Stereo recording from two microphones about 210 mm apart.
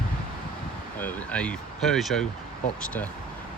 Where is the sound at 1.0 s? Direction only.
10° left (ahead or behind).